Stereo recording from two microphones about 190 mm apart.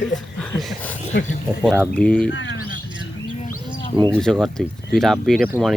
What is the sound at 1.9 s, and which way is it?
Speech, 5° left (ahead or behind).